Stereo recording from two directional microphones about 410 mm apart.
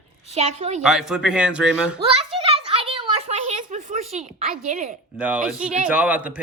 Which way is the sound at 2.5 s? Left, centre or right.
Centre.